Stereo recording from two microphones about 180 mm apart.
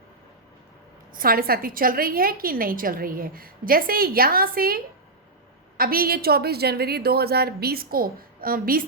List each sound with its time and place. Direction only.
1.1 s a woman's voice: 55° right (ahead or behind)